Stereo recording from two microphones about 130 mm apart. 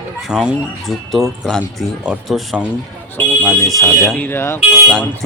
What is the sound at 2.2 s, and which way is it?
Speech, centre (ahead or behind).